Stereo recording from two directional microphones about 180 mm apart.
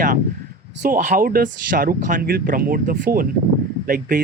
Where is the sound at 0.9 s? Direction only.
50° right (ahead or behind).